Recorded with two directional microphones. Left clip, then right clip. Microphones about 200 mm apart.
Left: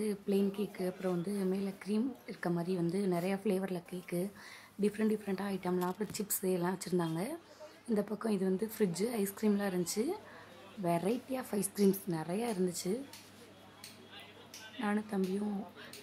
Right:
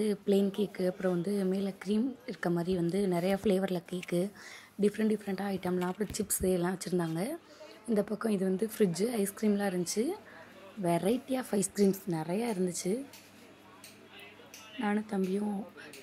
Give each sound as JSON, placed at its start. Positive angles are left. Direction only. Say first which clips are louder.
{"t": 0.0, "sound": "speech", "louder": "right 5 dB", "side_deg": -20}
{"t": 14.8, "sound": "speech", "louder": "right 3 dB", "side_deg": -15}